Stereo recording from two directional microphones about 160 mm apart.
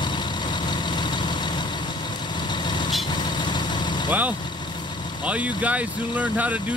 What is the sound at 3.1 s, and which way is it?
Vehicle, 30° left (ahead or behind).